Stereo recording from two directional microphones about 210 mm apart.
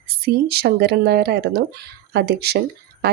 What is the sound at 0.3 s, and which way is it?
Speech, 50° right (ahead or behind).